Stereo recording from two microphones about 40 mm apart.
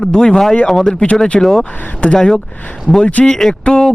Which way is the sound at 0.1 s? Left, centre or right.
Centre.